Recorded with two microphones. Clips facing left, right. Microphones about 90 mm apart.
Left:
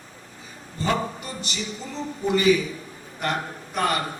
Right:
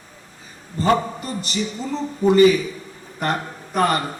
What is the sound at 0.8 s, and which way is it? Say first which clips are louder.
A man's voice: right 6 dB; 40° right (ahead or behind).